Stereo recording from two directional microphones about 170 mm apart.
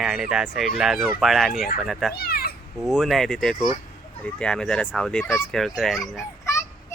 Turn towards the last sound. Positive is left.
turn(degrees=15)  # may be behind; listen again after turning